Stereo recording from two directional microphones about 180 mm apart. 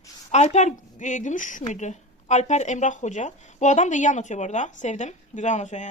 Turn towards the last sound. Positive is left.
turn(degrees=40)  # may be behind; listen again after turning